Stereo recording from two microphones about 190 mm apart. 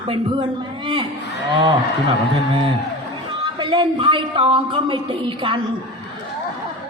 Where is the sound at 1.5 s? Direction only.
25° right (ahead or behind).